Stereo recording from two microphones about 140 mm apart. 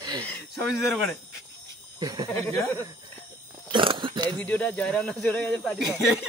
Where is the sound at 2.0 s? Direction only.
30° right (ahead or behind).